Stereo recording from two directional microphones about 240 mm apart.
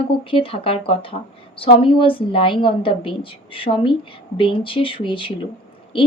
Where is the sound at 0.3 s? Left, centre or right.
Left.